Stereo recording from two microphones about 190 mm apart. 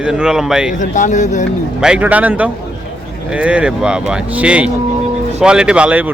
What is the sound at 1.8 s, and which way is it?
A man's voice, 5° right (ahead or behind).